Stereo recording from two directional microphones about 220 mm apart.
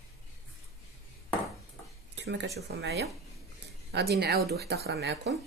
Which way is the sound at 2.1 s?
55° right (ahead or behind).